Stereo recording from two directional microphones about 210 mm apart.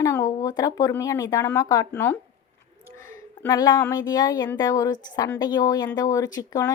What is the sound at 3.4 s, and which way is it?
Speech, 20° left (ahead or behind).